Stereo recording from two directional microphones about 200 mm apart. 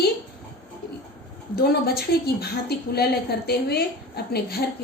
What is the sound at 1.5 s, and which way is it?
A woman's voice, 50° left (ahead or behind).